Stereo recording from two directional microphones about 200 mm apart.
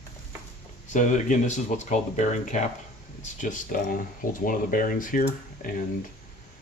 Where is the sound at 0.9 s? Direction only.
40° left (ahead or behind).